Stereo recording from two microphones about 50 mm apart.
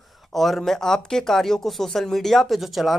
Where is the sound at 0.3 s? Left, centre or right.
Centre.